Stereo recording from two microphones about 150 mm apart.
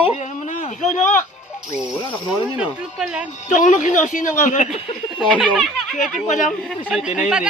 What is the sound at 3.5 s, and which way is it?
A woman's voice, 55° left (ahead or behind).